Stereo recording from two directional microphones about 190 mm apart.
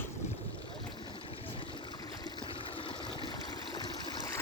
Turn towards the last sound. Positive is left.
turn(degrees=20)  # may be behind; listen again after turning